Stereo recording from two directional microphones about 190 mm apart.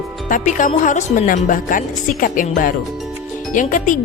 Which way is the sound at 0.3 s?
45° left (ahead or behind).